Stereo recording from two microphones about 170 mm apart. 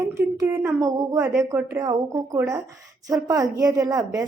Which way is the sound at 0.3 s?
15° right (ahead or behind).